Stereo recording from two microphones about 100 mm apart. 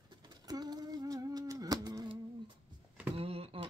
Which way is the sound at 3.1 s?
75° right (ahead or behind).